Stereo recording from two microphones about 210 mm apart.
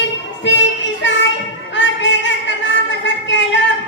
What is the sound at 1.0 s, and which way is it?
Music, 60° left (ahead or behind).